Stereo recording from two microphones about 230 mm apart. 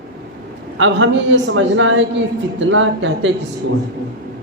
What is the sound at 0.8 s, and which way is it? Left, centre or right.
A man's voice, right.